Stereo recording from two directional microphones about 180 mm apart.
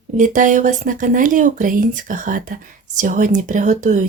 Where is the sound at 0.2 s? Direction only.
45° right (ahead or behind).